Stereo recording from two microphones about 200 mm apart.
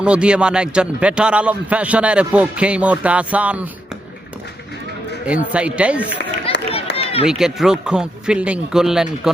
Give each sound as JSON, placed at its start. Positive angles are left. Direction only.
{"t": 0.0, "sound": "a man's voice", "side_deg": -5}
{"t": 5.2, "sound": "speech", "side_deg": -5}
{"t": 6.5, "sound": "run", "side_deg": 30}
{"t": 7.3, "sound": "a man's voice", "side_deg": -5}